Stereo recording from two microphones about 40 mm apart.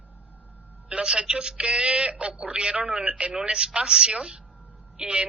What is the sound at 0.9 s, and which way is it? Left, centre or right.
A man's voice, right.